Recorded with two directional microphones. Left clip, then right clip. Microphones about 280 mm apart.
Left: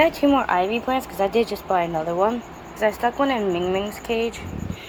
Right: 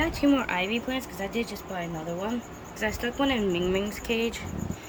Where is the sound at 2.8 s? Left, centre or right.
Centre.